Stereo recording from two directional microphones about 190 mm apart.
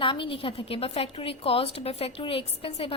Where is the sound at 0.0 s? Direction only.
25° left (ahead or behind).